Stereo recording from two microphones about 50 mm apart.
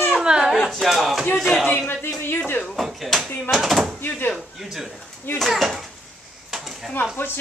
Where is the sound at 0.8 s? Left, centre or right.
Centre.